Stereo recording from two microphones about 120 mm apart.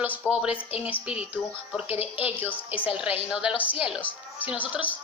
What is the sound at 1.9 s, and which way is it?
Speech, 55° left (ahead or behind).